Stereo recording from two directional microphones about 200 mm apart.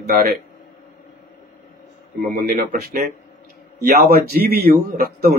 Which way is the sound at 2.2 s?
45° right (ahead or behind).